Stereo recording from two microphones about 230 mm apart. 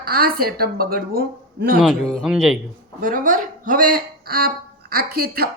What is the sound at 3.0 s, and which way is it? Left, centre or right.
Speech, right.